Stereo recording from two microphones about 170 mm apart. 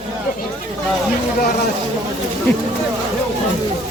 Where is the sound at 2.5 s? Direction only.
10° left (ahead or behind).